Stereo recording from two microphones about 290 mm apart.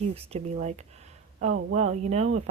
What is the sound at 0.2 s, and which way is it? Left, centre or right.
Speech, right.